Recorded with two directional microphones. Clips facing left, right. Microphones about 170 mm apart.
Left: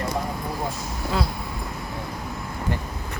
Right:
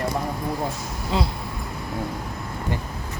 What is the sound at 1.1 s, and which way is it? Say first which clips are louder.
Speech: right 2 dB; 25° right (ahead or behind).